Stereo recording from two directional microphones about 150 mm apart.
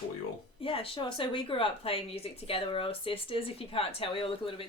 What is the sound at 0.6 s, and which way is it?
Speech, 40° left (ahead or behind).